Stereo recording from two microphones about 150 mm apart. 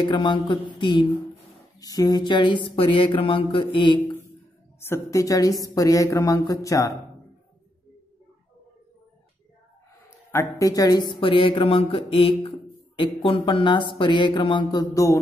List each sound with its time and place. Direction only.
0.0 s speech: 30° left (ahead or behind)
4.7 s a woman's voice: 15° left (ahead or behind)
10.0 s speech: 20° left (ahead or behind)